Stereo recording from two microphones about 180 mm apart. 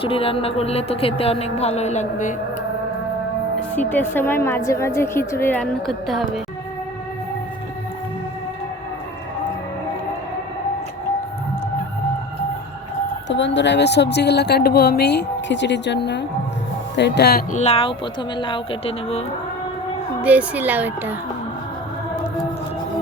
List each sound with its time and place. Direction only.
0.0 s speech: 30° left (ahead or behind)
3.8 s a woman's voice: 10° left (ahead or behind)
13.2 s a woman's voice: 90° left; by 17.4 s 65° left (ahead or behind)
17.5 s speech: 35° left (ahead or behind)
20.2 s speech: 10° right (ahead or behind)